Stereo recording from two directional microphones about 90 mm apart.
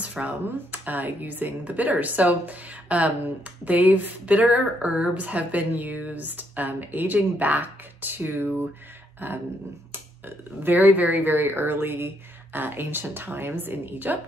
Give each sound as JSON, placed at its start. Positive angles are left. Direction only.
{"t": 0.0, "sound": "a woman's voice", "side_deg": -15}